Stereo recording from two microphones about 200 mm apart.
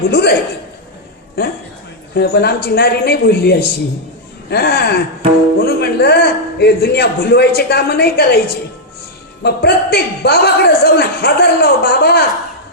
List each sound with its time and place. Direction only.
0.1 s a man's voice: 50° left (ahead or behind)